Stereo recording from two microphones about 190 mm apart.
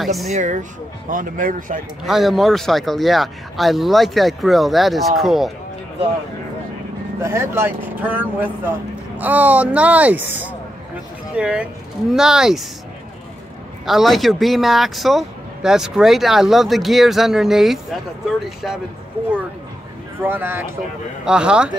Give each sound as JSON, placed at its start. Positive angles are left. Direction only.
{"t": 0.0, "sound": "speech", "side_deg": 0}
{"t": 0.3, "sound": "speech", "side_deg": -40}
{"t": 2.0, "sound": "speech", "side_deg": 0}
{"t": 7.2, "sound": "speech", "side_deg": -15}
{"t": 13.8, "sound": "speech", "side_deg": 0}
{"t": 20.2, "sound": "speech", "side_deg": -10}